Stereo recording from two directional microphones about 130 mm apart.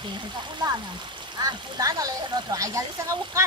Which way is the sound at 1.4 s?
30° right (ahead or behind).